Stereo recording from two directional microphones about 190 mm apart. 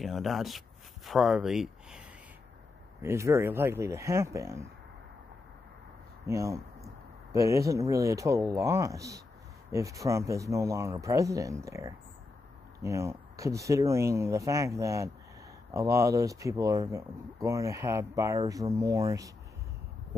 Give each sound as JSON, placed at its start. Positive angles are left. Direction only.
{"t": 0.0, "sound": "speech", "side_deg": 0}
{"t": 3.0, "sound": "speech", "side_deg": -15}
{"t": 6.2, "sound": "speech", "side_deg": -15}